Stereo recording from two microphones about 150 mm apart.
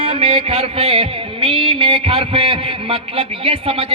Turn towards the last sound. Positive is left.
turn(degrees=-40)  # may be behind; listen again after turning